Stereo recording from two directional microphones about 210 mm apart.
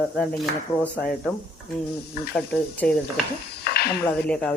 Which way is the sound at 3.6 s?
50° left (ahead or behind).